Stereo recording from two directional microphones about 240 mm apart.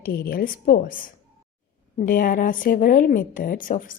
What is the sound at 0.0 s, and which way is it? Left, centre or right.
A woman's voice, left.